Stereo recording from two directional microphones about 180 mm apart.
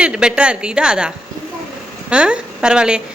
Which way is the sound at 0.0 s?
5° right (ahead or behind).